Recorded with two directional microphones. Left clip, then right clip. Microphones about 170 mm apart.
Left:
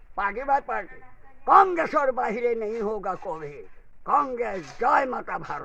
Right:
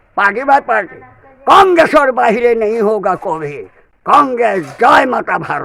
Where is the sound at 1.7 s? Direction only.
30° right (ahead or behind).